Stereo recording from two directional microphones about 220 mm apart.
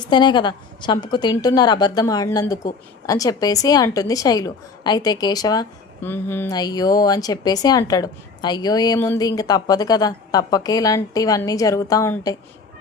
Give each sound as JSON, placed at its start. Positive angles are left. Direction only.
{"t": 0.0, "sound": "a woman's voice", "side_deg": 20}